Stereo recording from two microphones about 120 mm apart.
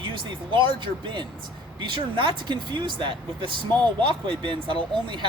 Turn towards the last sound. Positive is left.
turn(degrees=-40)  # may be behind; listen again after turning